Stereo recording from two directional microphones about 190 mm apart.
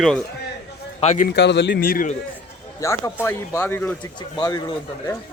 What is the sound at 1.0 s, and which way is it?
Speech, 40° left (ahead or behind).